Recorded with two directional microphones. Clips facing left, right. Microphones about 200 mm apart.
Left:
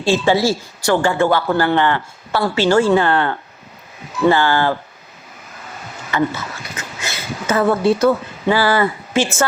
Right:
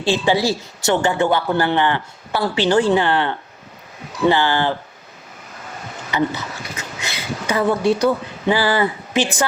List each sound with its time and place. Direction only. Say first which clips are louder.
0.1 s speech: left 2 dB; 15° right (ahead or behind)
6.1 s speech: left 1 dB; 15° right (ahead or behind)